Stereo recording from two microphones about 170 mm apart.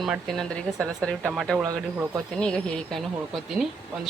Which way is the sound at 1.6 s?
20° right (ahead or behind).